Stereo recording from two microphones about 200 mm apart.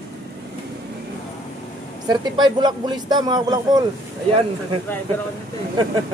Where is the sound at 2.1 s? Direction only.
20° right (ahead or behind).